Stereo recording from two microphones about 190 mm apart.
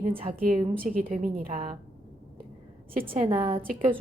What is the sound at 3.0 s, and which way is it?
Speech, 30° right (ahead or behind).